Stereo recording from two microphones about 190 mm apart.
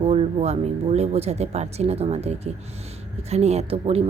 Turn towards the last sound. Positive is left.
turn(degrees=-30)  # may be behind; listen again after turning